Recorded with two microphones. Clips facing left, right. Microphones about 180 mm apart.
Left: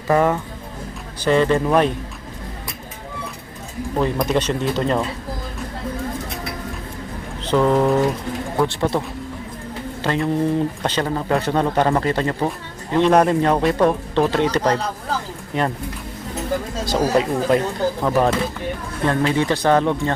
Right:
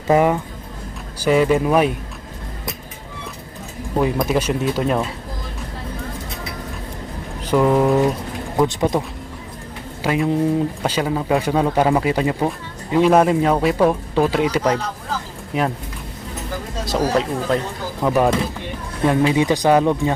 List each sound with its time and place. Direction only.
0.1 s speech: 15° right (ahead or behind)
3.9 s speech: 5° right (ahead or behind)
7.4 s speech: 10° right (ahead or behind)
8.5 s speech: 20° right (ahead or behind)
16.8 s speech: centre (ahead or behind)
18.0 s speech: 10° right (ahead or behind)